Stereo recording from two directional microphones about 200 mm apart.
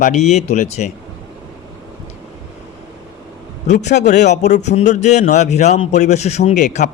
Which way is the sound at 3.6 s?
35° left (ahead or behind).